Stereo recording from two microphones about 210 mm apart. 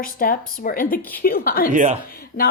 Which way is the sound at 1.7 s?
35° right (ahead or behind).